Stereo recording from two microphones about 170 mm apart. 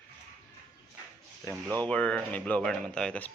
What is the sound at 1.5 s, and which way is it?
Speech, 20° right (ahead or behind).